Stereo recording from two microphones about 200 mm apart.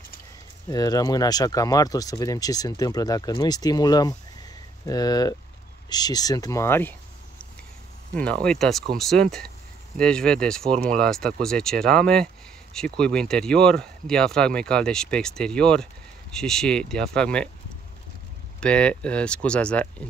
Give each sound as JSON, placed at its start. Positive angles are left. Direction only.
{"t": 0.7, "sound": "speech", "side_deg": 20}
{"t": 18.6, "sound": "speech", "side_deg": 5}